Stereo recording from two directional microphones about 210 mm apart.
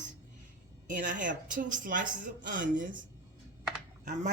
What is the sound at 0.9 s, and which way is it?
Speech, 40° right (ahead or behind).